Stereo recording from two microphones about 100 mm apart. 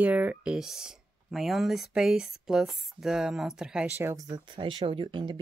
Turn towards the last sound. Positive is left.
turn(degrees=-55)  # may be behind; listen again after turning